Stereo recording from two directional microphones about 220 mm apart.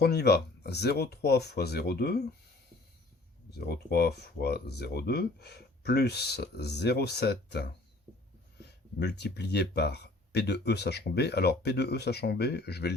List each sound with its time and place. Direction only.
0.0 s speech: 45° left (ahead or behind)
3.6 s speech: 45° left (ahead or behind)
9.0 s speech: 50° left (ahead or behind)